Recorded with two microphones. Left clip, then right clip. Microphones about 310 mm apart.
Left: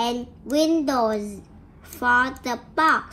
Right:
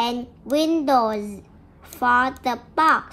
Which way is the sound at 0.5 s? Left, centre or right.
Right.